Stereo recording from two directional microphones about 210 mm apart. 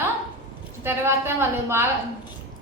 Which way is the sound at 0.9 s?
10° right (ahead or behind).